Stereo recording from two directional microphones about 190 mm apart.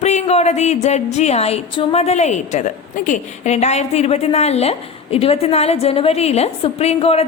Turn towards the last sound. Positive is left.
turn(degrees=35)  # may be behind; listen again after turning